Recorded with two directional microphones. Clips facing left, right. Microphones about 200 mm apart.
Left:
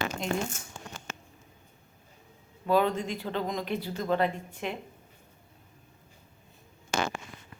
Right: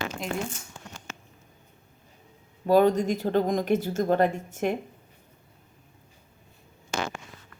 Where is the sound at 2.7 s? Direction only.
40° right (ahead or behind).